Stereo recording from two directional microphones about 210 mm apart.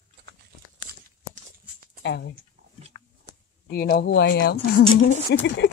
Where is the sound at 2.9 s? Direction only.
20° left (ahead or behind).